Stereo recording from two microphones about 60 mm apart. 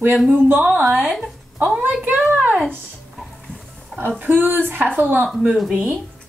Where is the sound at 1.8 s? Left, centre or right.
Right.